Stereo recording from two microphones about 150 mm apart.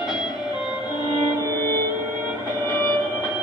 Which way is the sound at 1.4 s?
25° right (ahead or behind).